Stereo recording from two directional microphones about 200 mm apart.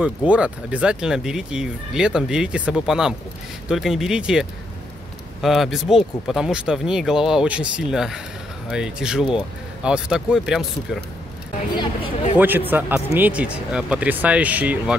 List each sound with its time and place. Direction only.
0.0 s speech: 5° right (ahead or behind)
11.7 s speech: 25° left (ahead or behind)
12.4 s speech: 10° right (ahead or behind)